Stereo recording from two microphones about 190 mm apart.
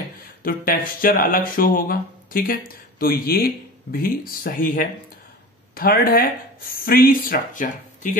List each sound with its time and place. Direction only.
0.4 s speech: 50° left (ahead or behind)